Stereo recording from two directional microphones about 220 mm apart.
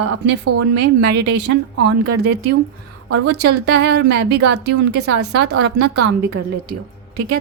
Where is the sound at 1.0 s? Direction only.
50° right (ahead or behind).